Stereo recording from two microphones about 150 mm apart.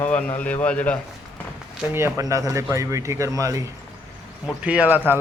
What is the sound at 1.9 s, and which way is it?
A man's voice, 20° right (ahead or behind).